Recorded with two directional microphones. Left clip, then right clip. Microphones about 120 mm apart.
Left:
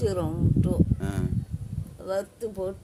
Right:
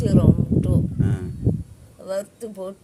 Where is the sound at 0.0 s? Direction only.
20° left (ahead or behind).